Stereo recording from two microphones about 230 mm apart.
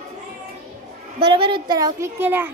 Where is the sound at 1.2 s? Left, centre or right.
Right.